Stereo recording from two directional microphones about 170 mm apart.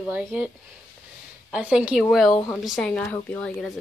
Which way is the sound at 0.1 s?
10° right (ahead or behind).